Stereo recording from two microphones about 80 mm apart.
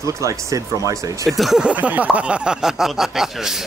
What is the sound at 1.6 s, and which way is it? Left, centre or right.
Speech, centre.